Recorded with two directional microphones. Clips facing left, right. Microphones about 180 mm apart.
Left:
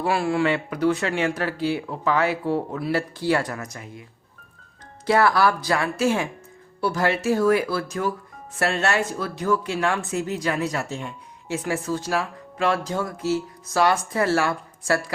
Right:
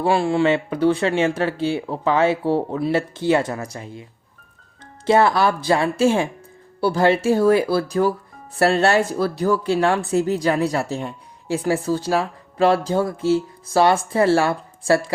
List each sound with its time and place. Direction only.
0.0 s speech: 25° right (ahead or behind)
5.0 s speech: 25° right (ahead or behind)